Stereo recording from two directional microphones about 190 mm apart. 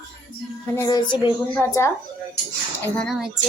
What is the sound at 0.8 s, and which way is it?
A child's voice, 20° left (ahead or behind).